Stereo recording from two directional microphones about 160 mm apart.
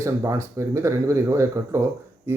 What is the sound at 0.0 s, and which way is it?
Speech, 20° right (ahead or behind).